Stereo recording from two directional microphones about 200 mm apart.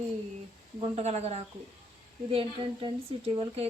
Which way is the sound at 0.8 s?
30° right (ahead or behind).